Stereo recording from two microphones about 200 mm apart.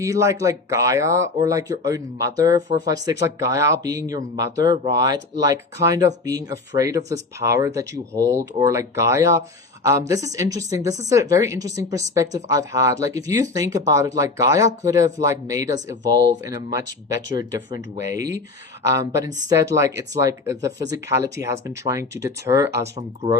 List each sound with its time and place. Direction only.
0.0 s speech: 15° right (ahead or behind)